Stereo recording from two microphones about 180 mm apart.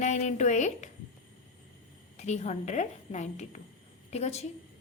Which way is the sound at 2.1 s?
40° left (ahead or behind).